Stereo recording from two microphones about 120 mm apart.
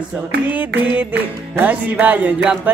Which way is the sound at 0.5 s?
15° right (ahead or behind).